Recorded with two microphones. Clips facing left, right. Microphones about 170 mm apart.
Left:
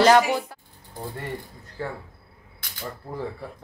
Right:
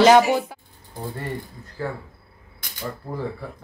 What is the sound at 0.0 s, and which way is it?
Speech, 20° right (ahead or behind).